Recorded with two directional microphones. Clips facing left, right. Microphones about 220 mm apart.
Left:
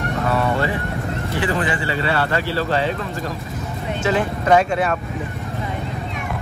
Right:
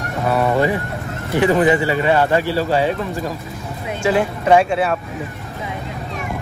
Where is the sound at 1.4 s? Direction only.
20° right (ahead or behind).